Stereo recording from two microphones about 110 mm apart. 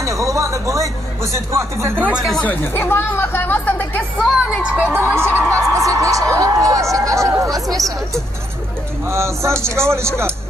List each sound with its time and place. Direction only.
0.0 s speech: 30° right (ahead or behind)
2.4 s speech: 20° left (ahead or behind)
4.5 s a man's voice: 10° right (ahead or behind); by 7.7 s 30° right (ahead or behind)
7.7 s speech: centre (ahead or behind)
9.0 s a man's voice: 25° right (ahead or behind)